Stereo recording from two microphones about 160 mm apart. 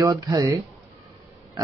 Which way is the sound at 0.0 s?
20° right (ahead or behind).